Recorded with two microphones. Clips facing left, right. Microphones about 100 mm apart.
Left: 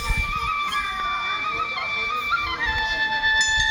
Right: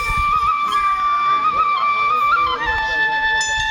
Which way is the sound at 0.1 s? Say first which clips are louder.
Right 11 dB; 50° right (ahead or behind).